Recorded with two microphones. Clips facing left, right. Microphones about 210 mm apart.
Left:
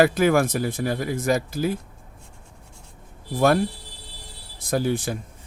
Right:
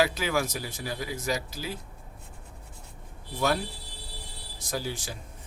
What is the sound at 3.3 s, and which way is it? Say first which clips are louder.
Speech: left 8 dB; 50° left (ahead or behind).